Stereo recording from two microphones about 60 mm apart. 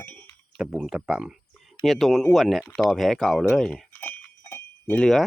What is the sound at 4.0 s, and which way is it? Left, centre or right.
Sheep, left.